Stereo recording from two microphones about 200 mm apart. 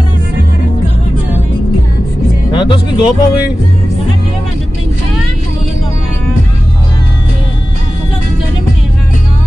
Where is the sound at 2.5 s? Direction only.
25° left (ahead or behind).